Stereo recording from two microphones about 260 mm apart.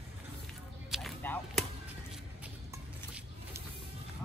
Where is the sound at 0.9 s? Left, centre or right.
Centre.